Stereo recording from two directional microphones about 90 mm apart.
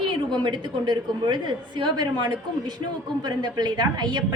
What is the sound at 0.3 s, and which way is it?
A woman's voice, 60° right (ahead or behind).